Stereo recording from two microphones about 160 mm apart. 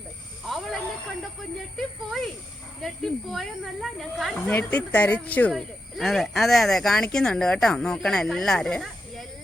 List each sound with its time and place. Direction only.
0.4 s snake: centre (ahead or behind)
1.7 s speech: centre (ahead or behind)